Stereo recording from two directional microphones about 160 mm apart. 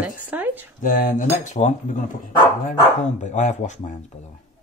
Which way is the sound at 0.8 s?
55° left (ahead or behind).